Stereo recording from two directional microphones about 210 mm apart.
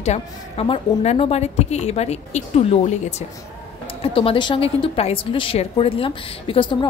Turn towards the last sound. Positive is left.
turn(degrees=20)  # may be behind; listen again after turning